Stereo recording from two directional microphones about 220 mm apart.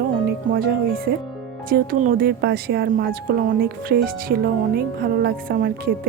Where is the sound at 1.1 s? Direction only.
45° right (ahead or behind).